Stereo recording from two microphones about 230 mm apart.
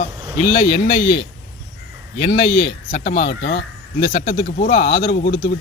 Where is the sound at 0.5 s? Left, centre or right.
Left.